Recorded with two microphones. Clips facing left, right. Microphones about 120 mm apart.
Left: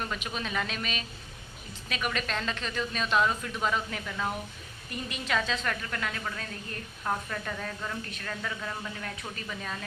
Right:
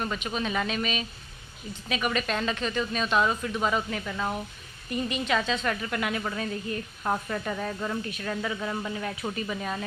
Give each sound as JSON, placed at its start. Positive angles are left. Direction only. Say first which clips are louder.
{"t": 0.0, "sound": "a woman's voice", "louder": "right 4 dB", "side_deg": -5}
{"t": 5.9, "sound": "speech", "louder": "right 5 dB", "side_deg": -15}